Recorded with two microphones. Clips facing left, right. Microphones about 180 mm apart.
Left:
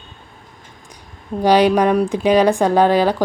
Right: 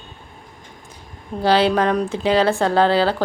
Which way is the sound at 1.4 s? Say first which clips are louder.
Left 3 dB; 15° left (ahead or behind).